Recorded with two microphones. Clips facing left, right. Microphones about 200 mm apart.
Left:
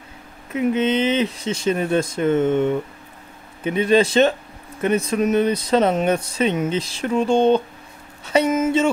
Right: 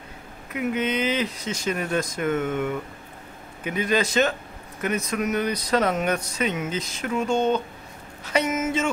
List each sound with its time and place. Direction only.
0.5 s speech: 25° left (ahead or behind)